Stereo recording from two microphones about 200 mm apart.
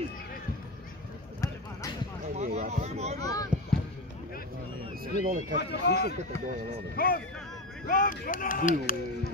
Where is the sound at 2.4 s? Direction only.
35° right (ahead or behind).